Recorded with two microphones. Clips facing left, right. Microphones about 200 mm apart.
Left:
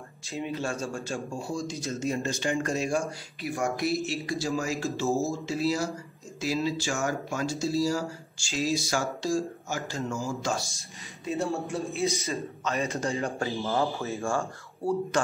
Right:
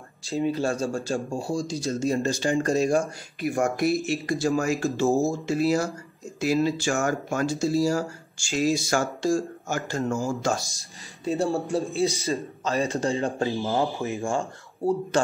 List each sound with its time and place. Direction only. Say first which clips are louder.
0.3 s speech: right 7 dB; 35° right (ahead or behind)
3.3 s speech: right 6 dB; 50° right (ahead or behind)
11.2 s speech: right 5 dB; 35° right (ahead or behind); by 14.4 s 15° right (ahead or behind)